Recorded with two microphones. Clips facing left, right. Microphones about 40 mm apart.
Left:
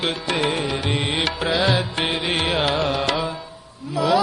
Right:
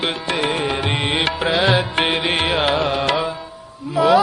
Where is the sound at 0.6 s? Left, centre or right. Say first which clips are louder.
Right 3 dB; right.